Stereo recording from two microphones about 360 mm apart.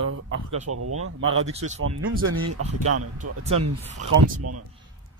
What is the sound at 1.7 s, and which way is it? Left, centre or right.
Speech, right.